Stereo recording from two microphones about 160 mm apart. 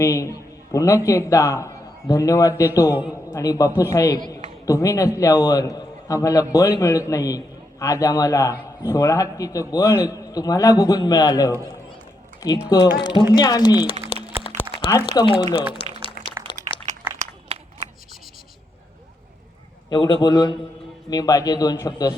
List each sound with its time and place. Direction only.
0.0 s a man's voice: 20° left (ahead or behind)
14.1 s music: 35° left (ahead or behind)
15.0 s a man's voice: 30° left (ahead or behind)
15.8 s a sound: 35° left (ahead or behind)
19.9 s a man's voice: 30° left (ahead or behind)